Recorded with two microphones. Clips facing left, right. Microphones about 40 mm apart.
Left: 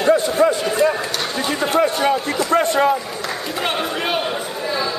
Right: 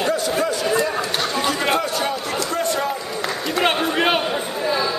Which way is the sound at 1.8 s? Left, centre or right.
Left.